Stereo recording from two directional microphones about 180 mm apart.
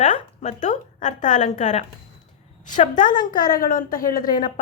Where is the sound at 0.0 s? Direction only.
40° left (ahead or behind).